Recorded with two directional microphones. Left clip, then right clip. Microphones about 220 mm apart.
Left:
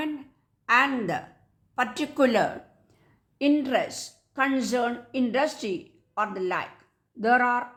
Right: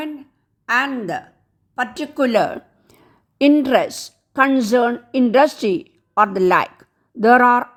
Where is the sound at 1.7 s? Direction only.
20° right (ahead or behind).